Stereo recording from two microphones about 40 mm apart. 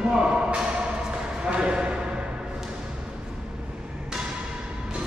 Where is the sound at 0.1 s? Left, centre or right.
Centre.